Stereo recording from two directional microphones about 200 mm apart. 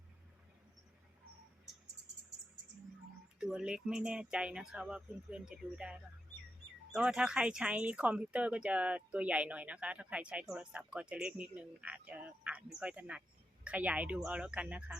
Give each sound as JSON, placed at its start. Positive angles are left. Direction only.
{"t": 3.4, "sound": "speech", "side_deg": -5}